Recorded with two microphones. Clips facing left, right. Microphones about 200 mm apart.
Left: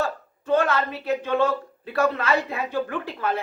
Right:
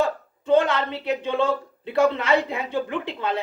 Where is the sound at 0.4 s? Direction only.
25° right (ahead or behind).